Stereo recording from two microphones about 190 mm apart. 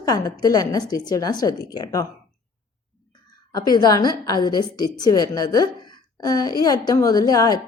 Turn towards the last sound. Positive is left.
turn(degrees=20)  # may be behind; listen again after turning